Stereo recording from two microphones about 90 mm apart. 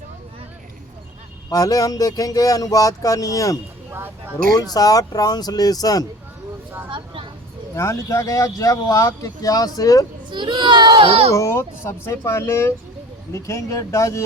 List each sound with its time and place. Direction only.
1.5 s speech: 40° left (ahead or behind)
3.9 s speech: 25° right (ahead or behind)
4.5 s speech: 45° left (ahead or behind)
6.9 s vehicle: 75° right (ahead or behind)
7.8 s speech: 35° left (ahead or behind)
10.2 s a child's voice: 60° right (ahead or behind); by 11.3 s 90° right
11.3 s speech: 30° left (ahead or behind)